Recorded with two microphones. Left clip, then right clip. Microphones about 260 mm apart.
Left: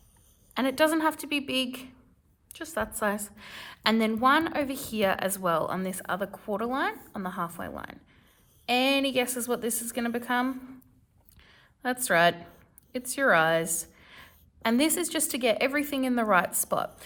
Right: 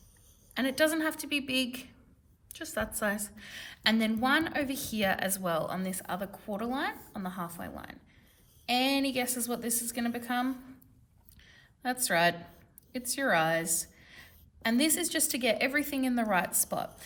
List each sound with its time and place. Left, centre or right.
0.5 s a woman's voice: centre
11.3 s a sound: left
12.9 s a woman's voice: left